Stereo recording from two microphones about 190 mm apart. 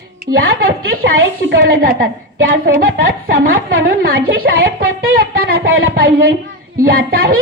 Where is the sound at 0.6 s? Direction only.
55° right (ahead or behind).